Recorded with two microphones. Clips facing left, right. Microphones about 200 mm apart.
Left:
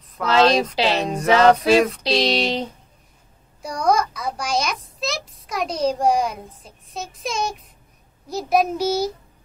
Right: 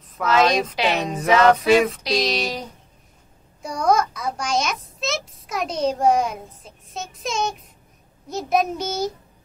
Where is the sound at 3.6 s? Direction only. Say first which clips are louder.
Even; centre (ahead or behind).